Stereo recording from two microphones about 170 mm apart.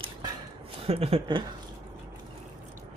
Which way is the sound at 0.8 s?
35° right (ahead or behind).